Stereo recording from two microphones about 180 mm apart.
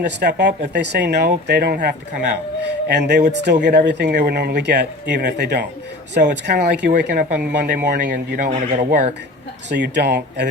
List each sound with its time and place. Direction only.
0.0 s speech: 70° right (ahead or behind)
8.4 s speech: 40° right (ahead or behind)
9.6 s speech: 70° right (ahead or behind)